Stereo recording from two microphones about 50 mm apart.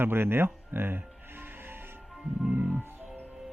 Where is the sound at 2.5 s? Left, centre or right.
Right.